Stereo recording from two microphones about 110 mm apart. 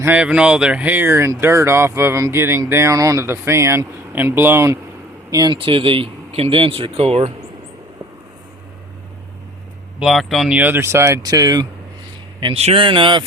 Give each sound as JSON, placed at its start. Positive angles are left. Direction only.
{"t": 0.0, "sound": "speech", "side_deg": -15}
{"t": 5.5, "sound": "speech", "side_deg": -55}
{"t": 10.0, "sound": "speech", "side_deg": 0}
{"t": 10.6, "sound": "speech", "side_deg": -20}
{"t": 12.5, "sound": "a man's voice", "side_deg": -70}
{"t": 12.8, "sound": "speech", "side_deg": -50}